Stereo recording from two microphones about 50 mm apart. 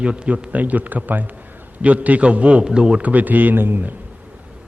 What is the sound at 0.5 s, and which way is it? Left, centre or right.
A man's voice, right.